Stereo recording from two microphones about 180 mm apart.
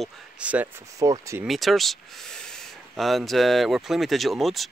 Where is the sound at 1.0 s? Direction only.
20° right (ahead or behind).